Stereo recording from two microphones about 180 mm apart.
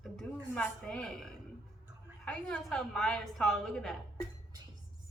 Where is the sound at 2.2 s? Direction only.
5° left (ahead or behind).